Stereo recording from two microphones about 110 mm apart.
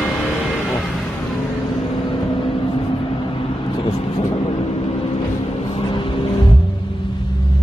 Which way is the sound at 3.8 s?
55° left (ahead or behind).